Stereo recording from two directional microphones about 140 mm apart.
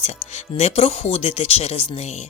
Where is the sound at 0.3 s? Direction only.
55° left (ahead or behind).